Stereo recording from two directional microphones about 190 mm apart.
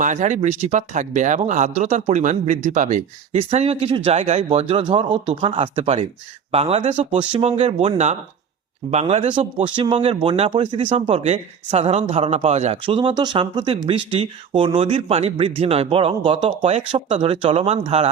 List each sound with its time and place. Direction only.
0.0 s speech: 40° right (ahead or behind)